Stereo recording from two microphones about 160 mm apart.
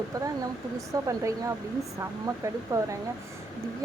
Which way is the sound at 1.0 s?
20° right (ahead or behind).